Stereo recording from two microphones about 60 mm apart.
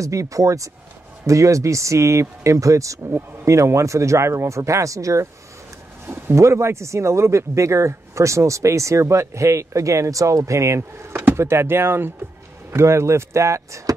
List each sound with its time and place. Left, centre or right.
0.0 s speech: right
6.3 s speech: right
11.1 s speech: right